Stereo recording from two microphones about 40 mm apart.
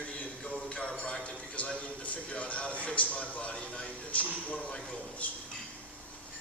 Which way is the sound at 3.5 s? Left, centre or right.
Left.